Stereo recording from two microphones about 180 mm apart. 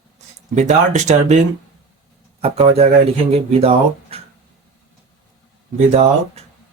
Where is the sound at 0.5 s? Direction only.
40° right (ahead or behind).